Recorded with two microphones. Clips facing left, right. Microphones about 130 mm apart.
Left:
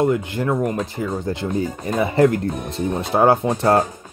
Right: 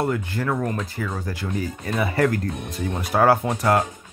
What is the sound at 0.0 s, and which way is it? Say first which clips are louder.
Speech: left 5 dB; 20° left (ahead or behind).